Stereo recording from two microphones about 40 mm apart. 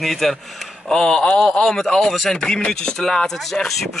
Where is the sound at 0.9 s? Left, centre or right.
Centre.